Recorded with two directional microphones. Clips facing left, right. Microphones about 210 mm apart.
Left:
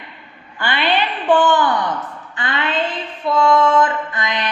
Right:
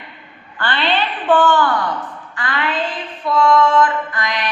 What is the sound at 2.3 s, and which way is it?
Mantra, 25° left (ahead or behind).